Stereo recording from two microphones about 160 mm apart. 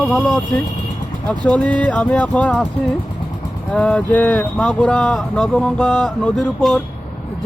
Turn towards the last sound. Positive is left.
turn(degrees=5)  # may be behind; listen again after turning